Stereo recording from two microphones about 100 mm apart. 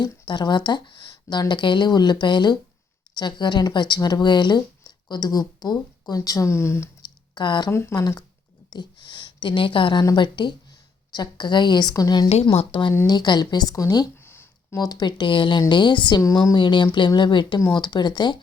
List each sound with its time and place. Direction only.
0.3 s speech: 50° left (ahead or behind); by 6.9 s 25° left (ahead or behind)
7.0 s a sound: 50° left (ahead or behind)
7.7 s speech: 25° left (ahead or behind)
7.9 s a woman's voice: 40° left (ahead or behind)
12.3 s speech: 90° left; by 12.9 s 65° left (ahead or behind)
13.1 s speech: 45° left (ahead or behind)
14.2 s a sound: 25° left (ahead or behind)
14.8 s speech: 45° left (ahead or behind)
16.2 s speech: 40° left (ahead or behind)